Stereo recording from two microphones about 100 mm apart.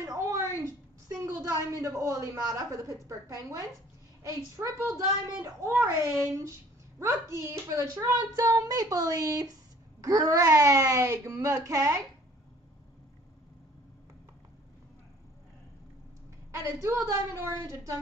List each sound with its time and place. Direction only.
0.0 s a sound: 35° right (ahead or behind)
1.2 s speech: 35° right (ahead or behind)
16.5 s speech: 30° right (ahead or behind)